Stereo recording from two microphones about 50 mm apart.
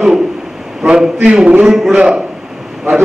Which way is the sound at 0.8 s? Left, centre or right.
Right.